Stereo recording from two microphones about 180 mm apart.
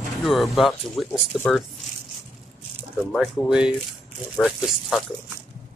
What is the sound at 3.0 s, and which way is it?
Speech, 5° left (ahead or behind).